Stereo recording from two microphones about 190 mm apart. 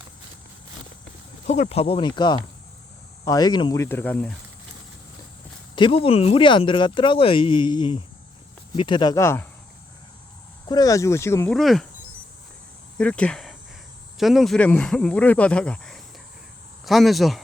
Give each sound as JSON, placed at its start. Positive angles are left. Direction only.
{"t": 1.5, "sound": "speech", "side_deg": 35}
{"t": 5.7, "sound": "speech", "side_deg": 25}
{"t": 10.7, "sound": "speech", "side_deg": 20}
{"t": 11.5, "sound": "speech", "side_deg": 0}
{"t": 13.0, "sound": "speech", "side_deg": 5}